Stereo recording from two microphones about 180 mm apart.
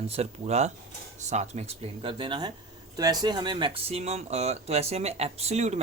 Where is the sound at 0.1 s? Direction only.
35° right (ahead or behind).